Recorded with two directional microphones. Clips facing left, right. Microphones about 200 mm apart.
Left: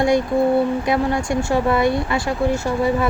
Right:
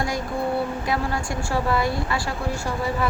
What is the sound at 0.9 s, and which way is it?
Speech, 20° left (ahead or behind).